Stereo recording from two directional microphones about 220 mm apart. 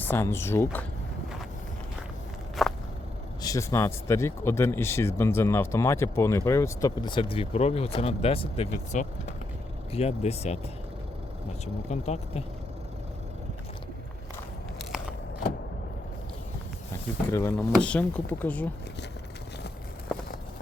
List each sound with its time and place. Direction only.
0.0 s speech: 10° left (ahead or behind)
2.6 s walk: centre (ahead or behind)
3.4 s speech: 15° left (ahead or behind)
11.6 s speech: 30° left (ahead or behind)
17.3 s speech: 10° left (ahead or behind)